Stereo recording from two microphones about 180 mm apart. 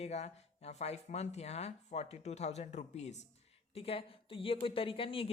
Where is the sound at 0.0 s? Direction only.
35° left (ahead or behind).